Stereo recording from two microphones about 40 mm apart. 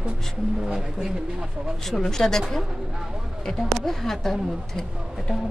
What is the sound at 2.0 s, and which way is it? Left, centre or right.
Speech, centre.